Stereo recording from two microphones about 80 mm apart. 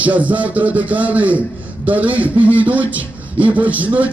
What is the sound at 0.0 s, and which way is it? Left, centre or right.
A man's voice, centre.